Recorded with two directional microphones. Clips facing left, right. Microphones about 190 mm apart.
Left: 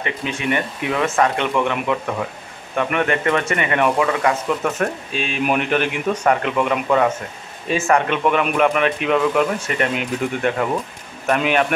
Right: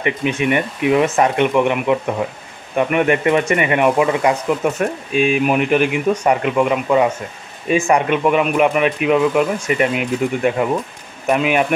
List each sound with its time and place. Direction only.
0.0 s speech: 15° right (ahead or behind)